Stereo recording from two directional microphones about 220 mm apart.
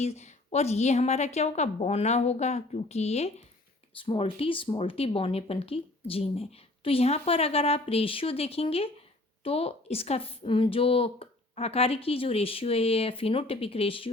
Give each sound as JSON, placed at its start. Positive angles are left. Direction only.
{"t": 0.0, "sound": "speech", "side_deg": 30}